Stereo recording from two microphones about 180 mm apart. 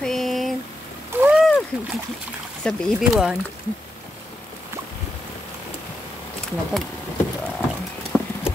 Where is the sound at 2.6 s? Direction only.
Centre (ahead or behind).